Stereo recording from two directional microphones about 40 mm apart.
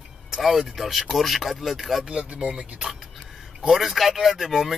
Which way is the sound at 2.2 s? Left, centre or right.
Right.